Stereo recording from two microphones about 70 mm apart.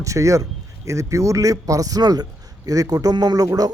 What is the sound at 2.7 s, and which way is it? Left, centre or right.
A man's voice, right.